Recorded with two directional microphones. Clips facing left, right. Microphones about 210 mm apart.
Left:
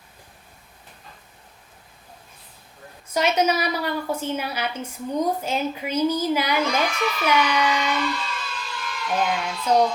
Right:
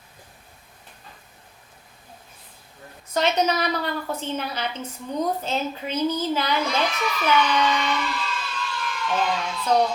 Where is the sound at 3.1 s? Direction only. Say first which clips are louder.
Left 1 dB; 10° left (ahead or behind).